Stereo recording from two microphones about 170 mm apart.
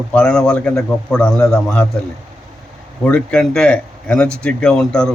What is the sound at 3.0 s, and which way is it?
A man's voice, 5° left (ahead or behind).